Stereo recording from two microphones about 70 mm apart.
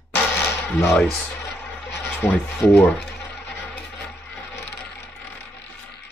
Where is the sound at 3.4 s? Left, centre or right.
Left.